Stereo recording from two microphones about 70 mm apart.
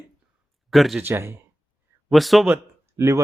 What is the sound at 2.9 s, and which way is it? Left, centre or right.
Speech, right.